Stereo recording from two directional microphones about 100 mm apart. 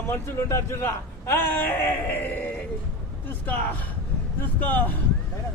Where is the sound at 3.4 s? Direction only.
20° left (ahead or behind).